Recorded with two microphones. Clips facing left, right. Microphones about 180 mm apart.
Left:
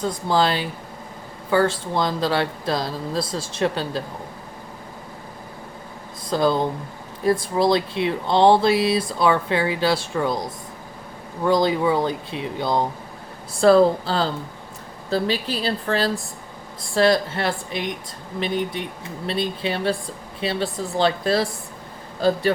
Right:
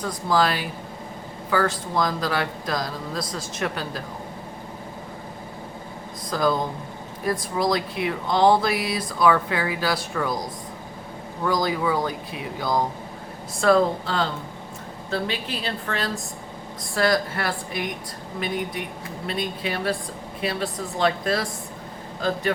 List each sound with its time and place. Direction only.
0.0 s speech: 25° left (ahead or behind)
6.3 s speech: 30° left (ahead or behind)
11.4 s a woman's voice: 25° left (ahead or behind)